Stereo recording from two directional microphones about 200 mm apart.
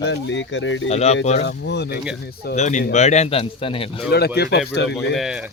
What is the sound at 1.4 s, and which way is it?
Speech, 60° left (ahead or behind).